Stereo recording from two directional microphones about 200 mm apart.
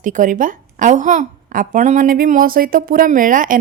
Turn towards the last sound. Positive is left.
turn(degrees=-40)  # may be behind; listen again after turning